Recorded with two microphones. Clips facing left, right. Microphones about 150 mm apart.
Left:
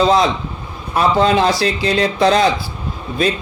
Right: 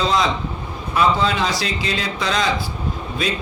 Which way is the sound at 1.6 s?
60° left (ahead or behind).